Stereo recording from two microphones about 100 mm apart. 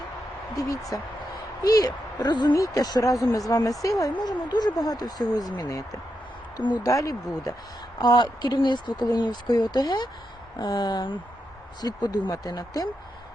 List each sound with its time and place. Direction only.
0.5 s speech: 35° left (ahead or behind)
4.1 s speech: 45° left (ahead or behind)
11.8 s speech: 40° left (ahead or behind)